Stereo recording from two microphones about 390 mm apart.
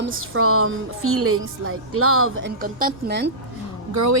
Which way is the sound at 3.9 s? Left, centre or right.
Right.